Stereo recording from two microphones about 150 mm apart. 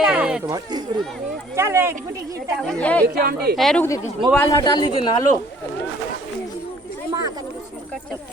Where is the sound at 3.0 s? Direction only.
90° right.